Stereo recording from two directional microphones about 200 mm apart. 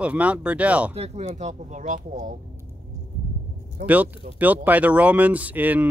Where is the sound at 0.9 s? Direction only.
30° right (ahead or behind).